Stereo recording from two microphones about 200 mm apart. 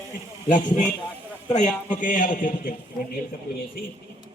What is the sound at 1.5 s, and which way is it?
Speech, 40° left (ahead or behind).